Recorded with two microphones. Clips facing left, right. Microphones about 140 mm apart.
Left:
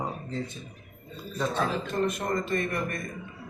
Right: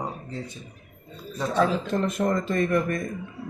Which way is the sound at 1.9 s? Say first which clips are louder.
Left 1 dB; 60° right (ahead or behind).